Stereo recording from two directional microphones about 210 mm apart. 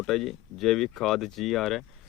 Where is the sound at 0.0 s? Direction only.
Centre (ahead or behind).